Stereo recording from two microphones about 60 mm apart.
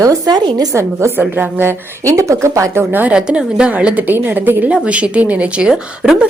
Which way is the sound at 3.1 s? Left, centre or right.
Centre.